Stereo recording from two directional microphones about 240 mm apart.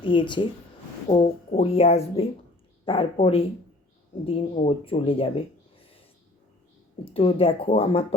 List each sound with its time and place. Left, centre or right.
0.0 s speech: left
7.0 s speech: left